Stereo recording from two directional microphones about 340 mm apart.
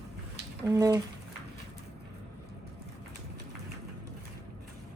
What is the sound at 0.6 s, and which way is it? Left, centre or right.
Speech, centre.